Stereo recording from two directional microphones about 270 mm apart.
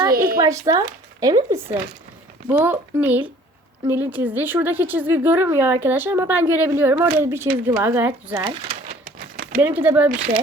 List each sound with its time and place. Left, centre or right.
0.1 s speech: right
0.3 s speech: centre
9.3 s a sound: right
9.6 s speech: centre